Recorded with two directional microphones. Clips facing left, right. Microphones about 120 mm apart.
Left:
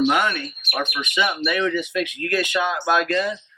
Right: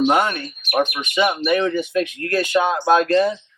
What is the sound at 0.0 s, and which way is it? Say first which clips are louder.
Speech: right 2 dB; 35° right (ahead or behind).